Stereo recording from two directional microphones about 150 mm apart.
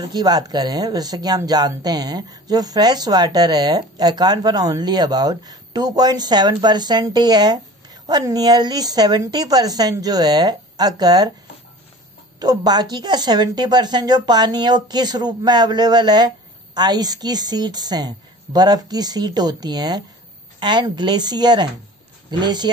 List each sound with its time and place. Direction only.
0.1 s speech: 25° right (ahead or behind)
12.4 s speech: 25° right (ahead or behind)